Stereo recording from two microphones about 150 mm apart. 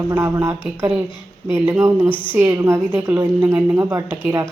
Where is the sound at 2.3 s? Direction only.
15° right (ahead or behind).